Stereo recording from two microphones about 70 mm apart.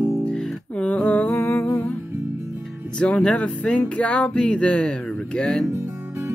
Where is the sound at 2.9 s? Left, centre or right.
Centre.